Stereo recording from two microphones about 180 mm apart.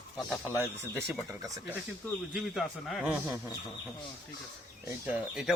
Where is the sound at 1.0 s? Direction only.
20° right (ahead or behind).